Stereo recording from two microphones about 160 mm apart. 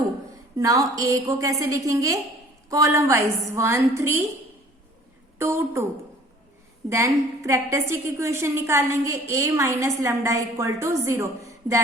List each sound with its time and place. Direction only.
0.5 s a woman's voice: 20° right (ahead or behind)
5.4 s a woman's voice: 15° right (ahead or behind)
6.9 s a woman's voice: 20° right (ahead or behind)